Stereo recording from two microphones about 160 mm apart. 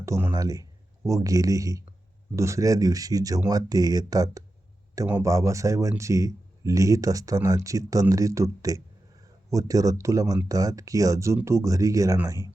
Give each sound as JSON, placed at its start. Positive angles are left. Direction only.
{"t": 0.0, "sound": "speech", "side_deg": -15}